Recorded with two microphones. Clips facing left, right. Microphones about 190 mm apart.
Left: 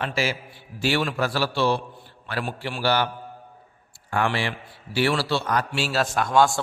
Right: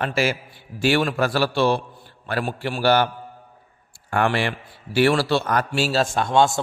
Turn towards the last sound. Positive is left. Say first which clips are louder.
# right 1 dB
turn(degrees=-25)  # may be behind; listen again after turning